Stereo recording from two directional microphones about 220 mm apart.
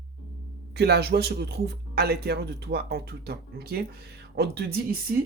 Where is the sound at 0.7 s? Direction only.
45° right (ahead or behind).